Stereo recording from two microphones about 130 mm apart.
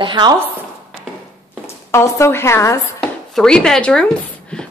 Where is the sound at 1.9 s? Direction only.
20° left (ahead or behind).